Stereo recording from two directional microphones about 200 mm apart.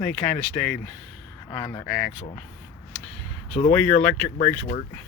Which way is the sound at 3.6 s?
15° left (ahead or behind).